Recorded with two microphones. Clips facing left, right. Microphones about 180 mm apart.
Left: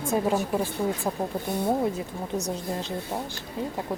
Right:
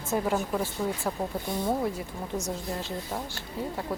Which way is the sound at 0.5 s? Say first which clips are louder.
Left 3 dB; 15° left (ahead or behind).